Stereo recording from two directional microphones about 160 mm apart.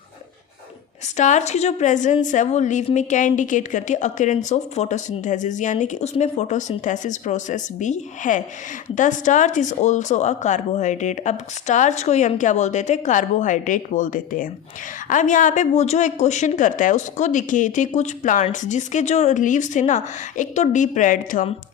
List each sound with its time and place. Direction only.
1.1 s a woman's voice: 50° left (ahead or behind)